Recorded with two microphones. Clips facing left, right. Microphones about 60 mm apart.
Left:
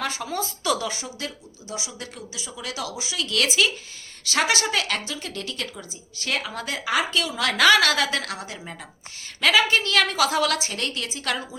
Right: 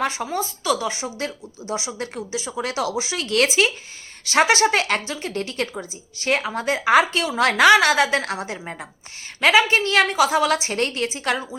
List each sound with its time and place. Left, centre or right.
0.0 s a woman's voice: right
1.0 s a woman's voice: right
10.2 s a woman's voice: centre
10.7 s a woman's voice: right